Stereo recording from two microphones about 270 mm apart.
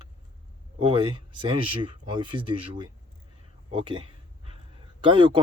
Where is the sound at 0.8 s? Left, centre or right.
Centre.